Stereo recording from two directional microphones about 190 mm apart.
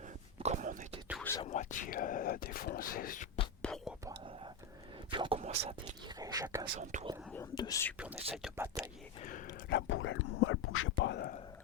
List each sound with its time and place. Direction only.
0.3 s whispering: 35° right (ahead or behind)
1.2 s whispering: 15° left (ahead or behind)
1.5 s speech: 40° left (ahead or behind)
3.6 s whispering: 5° left (ahead or behind)
5.1 s whispering: 25° right (ahead or behind)
6.1 s speech: 20° right (ahead or behind)
6.9 s speech: 40° right (ahead or behind)
7.5 s speech: 20° left (ahead or behind)
8.1 s speech: 30° right (ahead or behind)
8.5 s speech: 10° right (ahead or behind)
9.2 s a sound: 45° left (ahead or behind)
9.6 s whispering: 70° left (ahead or behind)